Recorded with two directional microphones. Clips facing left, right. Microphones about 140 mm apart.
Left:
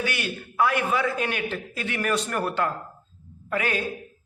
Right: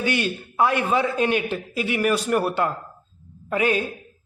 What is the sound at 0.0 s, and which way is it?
A man's voice, 25° right (ahead or behind).